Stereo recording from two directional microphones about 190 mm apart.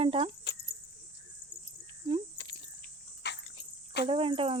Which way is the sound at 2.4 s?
70° left (ahead or behind).